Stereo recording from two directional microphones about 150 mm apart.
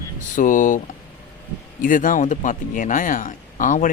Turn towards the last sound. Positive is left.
turn(degrees=60)  # may be behind; listen again after turning